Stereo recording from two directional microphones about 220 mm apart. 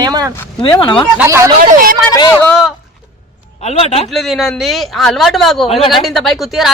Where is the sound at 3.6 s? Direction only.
30° left (ahead or behind).